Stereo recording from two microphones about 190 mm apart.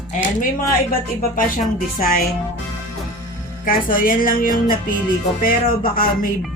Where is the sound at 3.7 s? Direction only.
45° left (ahead or behind).